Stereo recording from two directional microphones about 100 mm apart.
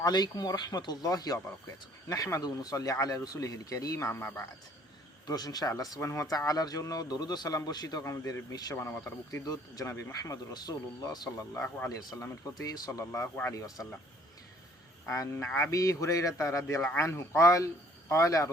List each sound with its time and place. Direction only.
0.0 s a man's voice: 45° left (ahead or behind); by 4.4 s 25° left (ahead or behind)
5.2 s a man's voice: 40° left (ahead or behind)
8.7 s speech: 25° left (ahead or behind)
9.0 s a man's voice: 35° left (ahead or behind)
11.5 s speech: 20° left (ahead or behind)
11.9 s speech: 35° left (ahead or behind); by 13.5 s 20° left (ahead or behind)
13.5 s a man's voice: 35° left (ahead or behind)
15.0 s a man's voice: 30° left (ahead or behind)